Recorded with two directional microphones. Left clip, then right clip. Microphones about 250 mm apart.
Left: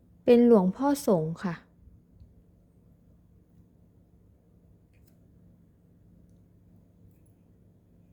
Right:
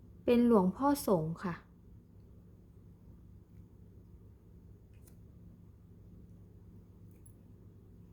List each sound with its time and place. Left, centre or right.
0.3 s a woman's voice: centre